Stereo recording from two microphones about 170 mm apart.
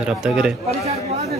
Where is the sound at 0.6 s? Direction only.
40° right (ahead or behind).